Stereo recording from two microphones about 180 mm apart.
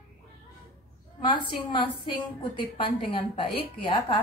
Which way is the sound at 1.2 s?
25° left (ahead or behind).